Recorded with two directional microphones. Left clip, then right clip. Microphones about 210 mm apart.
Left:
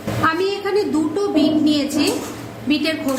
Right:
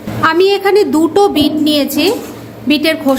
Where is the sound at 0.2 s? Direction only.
35° right (ahead or behind).